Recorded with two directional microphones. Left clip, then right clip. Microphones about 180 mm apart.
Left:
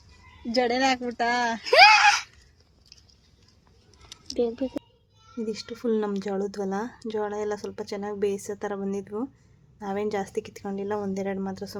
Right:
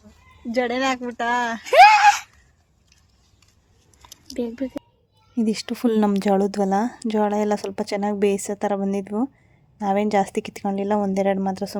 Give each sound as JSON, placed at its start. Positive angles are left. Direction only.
{"t": 0.5, "sound": "speech", "side_deg": -20}
{"t": 5.4, "sound": "a woman's voice", "side_deg": -45}